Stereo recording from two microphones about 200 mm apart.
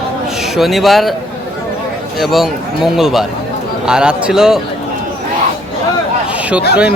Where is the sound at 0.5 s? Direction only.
Centre (ahead or behind).